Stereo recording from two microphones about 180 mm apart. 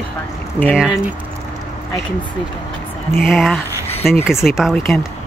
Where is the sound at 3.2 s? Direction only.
Centre (ahead or behind).